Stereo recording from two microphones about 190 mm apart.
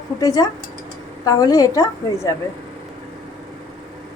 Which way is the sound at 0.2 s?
20° left (ahead or behind).